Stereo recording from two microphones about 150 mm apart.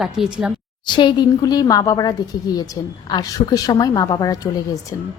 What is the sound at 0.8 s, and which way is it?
A woman's voice, 30° left (ahead or behind).